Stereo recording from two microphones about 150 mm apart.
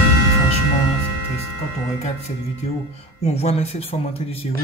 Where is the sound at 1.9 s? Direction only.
45° left (ahead or behind).